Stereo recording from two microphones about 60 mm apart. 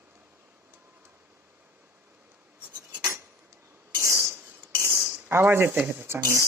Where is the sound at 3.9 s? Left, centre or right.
Right.